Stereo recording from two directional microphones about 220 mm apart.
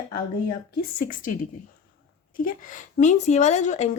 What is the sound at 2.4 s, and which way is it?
A woman's voice, 35° left (ahead or behind).